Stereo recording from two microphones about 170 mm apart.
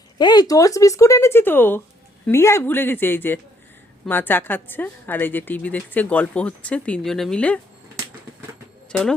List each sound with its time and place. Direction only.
0.2 s a woman's voice: 25° left (ahead or behind); by 7.6 s 5° left (ahead or behind)
8.9 s speech: 5° left (ahead or behind)